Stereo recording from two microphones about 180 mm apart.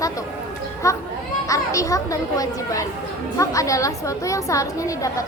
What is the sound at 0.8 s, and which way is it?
A woman's voice, 20° left (ahead or behind).